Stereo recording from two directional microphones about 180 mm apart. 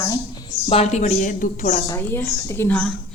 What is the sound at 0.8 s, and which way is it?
A woman's voice, 40° left (ahead or behind).